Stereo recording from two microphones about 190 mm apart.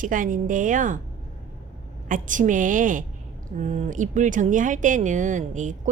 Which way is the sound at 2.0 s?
45° right (ahead or behind).